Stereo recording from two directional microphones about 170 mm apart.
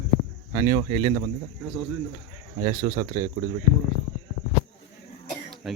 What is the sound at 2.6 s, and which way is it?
Speech, 20° right (ahead or behind).